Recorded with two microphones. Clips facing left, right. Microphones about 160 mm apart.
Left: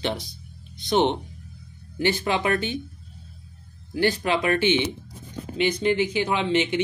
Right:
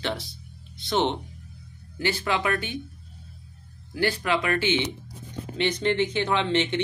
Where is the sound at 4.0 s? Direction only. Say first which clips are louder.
Left 2 dB; 20° left (ahead or behind).